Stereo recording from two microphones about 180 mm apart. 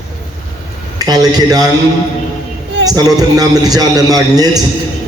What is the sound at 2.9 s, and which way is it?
A man's voice, 20° right (ahead or behind).